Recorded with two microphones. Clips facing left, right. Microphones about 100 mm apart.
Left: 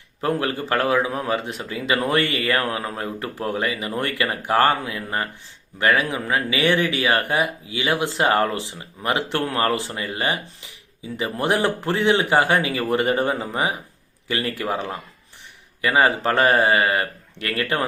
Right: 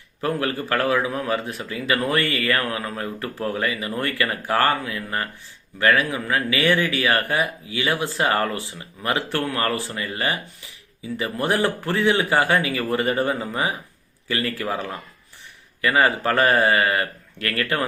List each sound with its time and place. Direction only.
0.2 s speech: 25° left (ahead or behind)